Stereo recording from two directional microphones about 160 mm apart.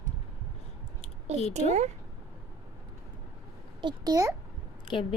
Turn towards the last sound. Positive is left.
turn(degrees=30)  # may be behind; listen again after turning